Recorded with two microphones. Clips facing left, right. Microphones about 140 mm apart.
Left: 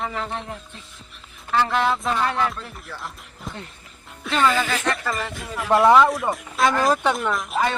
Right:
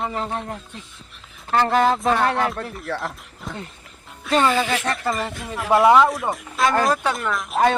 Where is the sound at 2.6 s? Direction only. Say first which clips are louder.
Right 9 dB; 70° right (ahead or behind).